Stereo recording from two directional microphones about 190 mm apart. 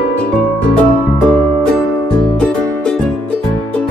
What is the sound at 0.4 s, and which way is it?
Music, 5° left (ahead or behind).